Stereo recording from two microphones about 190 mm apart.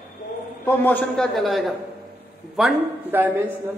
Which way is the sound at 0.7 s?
10° left (ahead or behind).